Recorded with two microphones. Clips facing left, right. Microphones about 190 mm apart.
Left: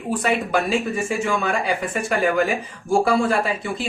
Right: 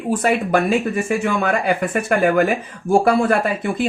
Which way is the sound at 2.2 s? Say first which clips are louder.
Right 3 dB; 55° right (ahead or behind).